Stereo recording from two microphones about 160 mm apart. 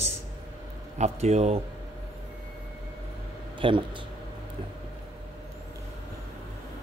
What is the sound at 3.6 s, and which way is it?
Speech, 30° right (ahead or behind).